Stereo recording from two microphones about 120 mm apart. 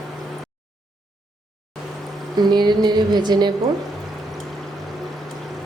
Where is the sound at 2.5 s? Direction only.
35° right (ahead or behind).